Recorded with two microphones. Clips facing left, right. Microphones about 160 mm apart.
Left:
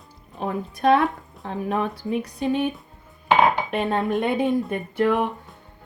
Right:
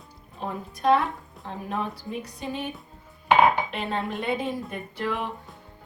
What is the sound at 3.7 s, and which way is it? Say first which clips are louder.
Dishes: left 6 dB; 50° left (ahead or behind).